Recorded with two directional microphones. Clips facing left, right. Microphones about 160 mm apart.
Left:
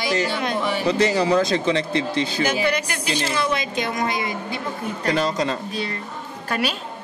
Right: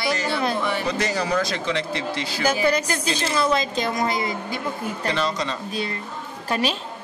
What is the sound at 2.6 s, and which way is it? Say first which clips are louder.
A woman's voice: right 2 dB; 40° right (ahead or behind).